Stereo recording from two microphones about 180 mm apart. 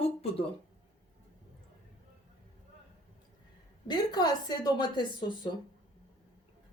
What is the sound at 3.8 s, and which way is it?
A woman's voice, 25° left (ahead or behind).